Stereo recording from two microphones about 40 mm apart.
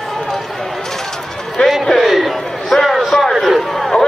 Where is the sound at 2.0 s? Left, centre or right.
Centre.